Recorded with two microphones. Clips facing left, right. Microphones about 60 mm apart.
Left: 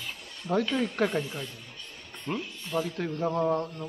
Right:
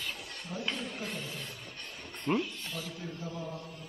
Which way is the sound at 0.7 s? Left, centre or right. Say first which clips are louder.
Left 12 dB; left.